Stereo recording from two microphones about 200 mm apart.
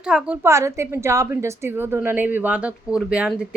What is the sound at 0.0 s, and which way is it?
A woman's voice, 5° right (ahead or behind).